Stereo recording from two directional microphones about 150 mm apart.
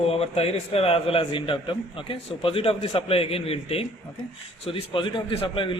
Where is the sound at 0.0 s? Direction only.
40° left (ahead or behind).